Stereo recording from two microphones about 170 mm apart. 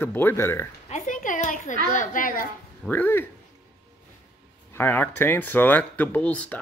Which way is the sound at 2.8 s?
10° left (ahead or behind).